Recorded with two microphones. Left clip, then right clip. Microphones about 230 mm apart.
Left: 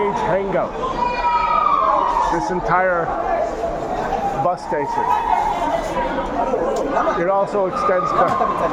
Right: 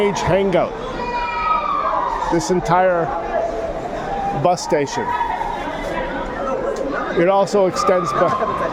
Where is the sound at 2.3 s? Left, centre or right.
Right.